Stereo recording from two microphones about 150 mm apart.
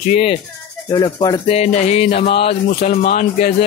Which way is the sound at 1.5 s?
50° left (ahead or behind).